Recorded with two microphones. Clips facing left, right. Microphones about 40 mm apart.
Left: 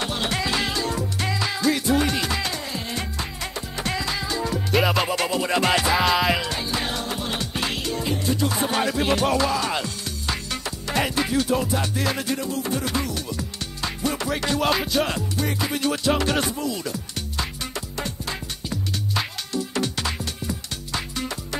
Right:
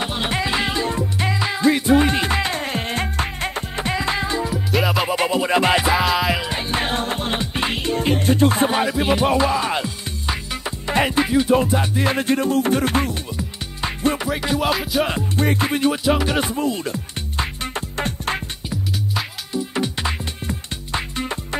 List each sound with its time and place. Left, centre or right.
0.0 s music: right
3.8 s music: right
4.4 s music: centre
5.1 s music: centre
5.9 s music: centre
6.5 s music: right
7.3 s music: right
8.6 s music: centre
12.1 s music: right
13.4 s music: right
15.3 s music: right
15.8 s music: centre
16.4 s music: right
19.5 s music: centre